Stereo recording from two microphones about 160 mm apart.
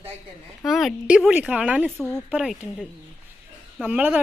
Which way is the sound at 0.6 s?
Centre (ahead or behind).